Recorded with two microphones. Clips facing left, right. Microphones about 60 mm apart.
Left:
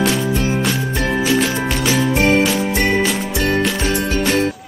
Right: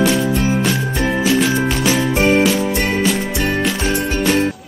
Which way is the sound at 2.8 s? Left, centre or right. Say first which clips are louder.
Even; centre.